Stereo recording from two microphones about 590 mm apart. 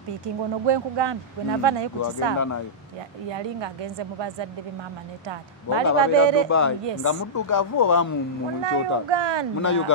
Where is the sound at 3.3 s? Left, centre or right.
Right.